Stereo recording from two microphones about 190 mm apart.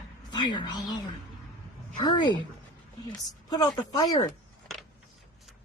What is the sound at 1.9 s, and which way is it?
Speech, 25° left (ahead or behind).